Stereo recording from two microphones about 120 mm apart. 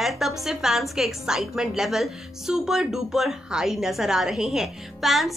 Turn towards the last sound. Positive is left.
turn(degrees=0)  # may be behind; listen again after turning